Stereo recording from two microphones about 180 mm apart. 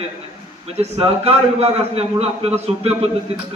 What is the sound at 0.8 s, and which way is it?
A man's voice, 35° right (ahead or behind).